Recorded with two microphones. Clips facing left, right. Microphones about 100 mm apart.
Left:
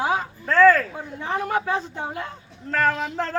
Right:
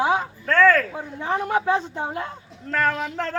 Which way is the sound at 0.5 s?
5° left (ahead or behind).